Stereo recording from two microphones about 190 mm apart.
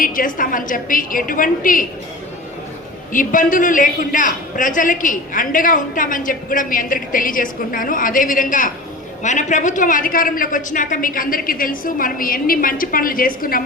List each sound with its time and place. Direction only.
0.0 s a man's voice: 45° left (ahead or behind)
3.1 s a man's voice: 45° left (ahead or behind)